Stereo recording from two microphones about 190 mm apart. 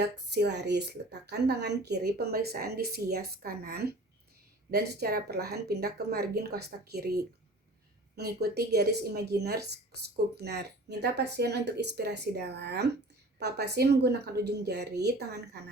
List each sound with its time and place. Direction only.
0.0 s a woman's voice: 60° right (ahead or behind)